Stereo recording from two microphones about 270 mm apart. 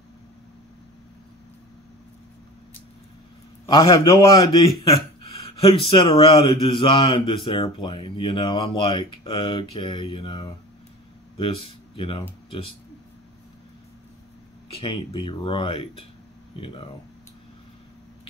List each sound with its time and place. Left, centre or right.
3.6 s a man's voice: centre
14.7 s speech: centre